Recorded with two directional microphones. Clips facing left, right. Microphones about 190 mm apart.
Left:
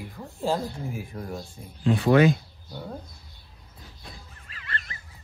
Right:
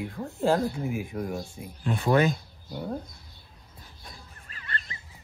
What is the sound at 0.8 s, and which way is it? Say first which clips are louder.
Speech: right 4 dB; 15° right (ahead or behind).